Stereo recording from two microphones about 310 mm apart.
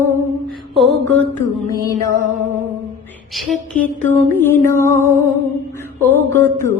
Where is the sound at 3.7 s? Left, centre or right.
Left.